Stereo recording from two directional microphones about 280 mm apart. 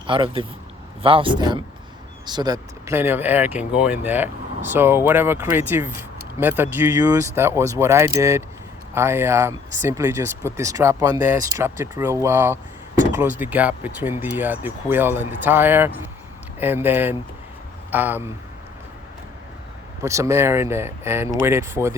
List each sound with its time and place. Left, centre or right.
0.1 s speech: centre
20.0 s speech: centre